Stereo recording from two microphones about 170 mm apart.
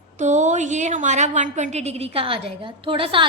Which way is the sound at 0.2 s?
45° right (ahead or behind).